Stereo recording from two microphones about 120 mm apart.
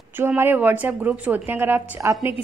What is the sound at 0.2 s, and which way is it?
A woman's voice, 20° right (ahead or behind).